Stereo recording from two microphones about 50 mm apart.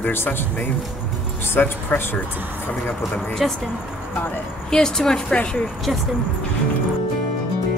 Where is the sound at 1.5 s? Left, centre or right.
Left.